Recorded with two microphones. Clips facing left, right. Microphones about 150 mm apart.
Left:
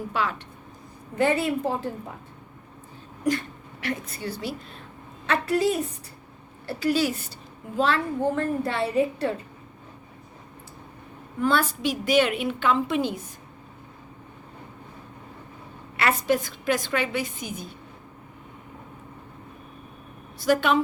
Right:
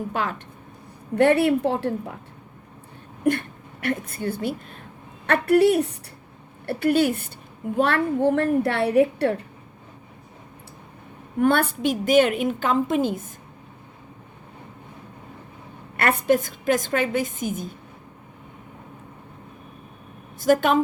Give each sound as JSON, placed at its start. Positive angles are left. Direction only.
{"t": 0.1, "sound": "speech", "side_deg": -50}
{"t": 1.1, "sound": "a woman's voice", "side_deg": -65}
{"t": 3.2, "sound": "a woman's voice", "side_deg": -55}
{"t": 11.3, "sound": "a woman's voice", "side_deg": -55}
{"t": 16.0, "sound": "a woman's voice", "side_deg": -55}
{"t": 20.4, "sound": "a woman's voice", "side_deg": -45}